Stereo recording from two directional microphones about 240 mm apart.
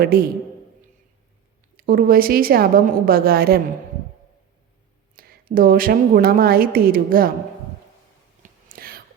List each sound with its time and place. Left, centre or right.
0.0 s a woman's voice: right
1.7 s a woman's voice: right
5.1 s a woman's voice: right
8.4 s a sound: right